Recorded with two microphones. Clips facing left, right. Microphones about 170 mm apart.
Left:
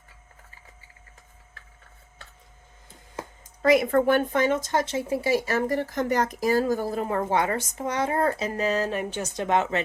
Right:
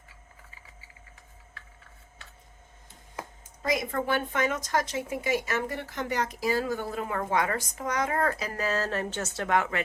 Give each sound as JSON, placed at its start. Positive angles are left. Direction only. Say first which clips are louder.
{"t": 3.6, "sound": "speech", "louder": "left 9 dB", "side_deg": 65}
{"t": 4.3, "sound": "speech", "louder": "left 5 dB", "side_deg": 30}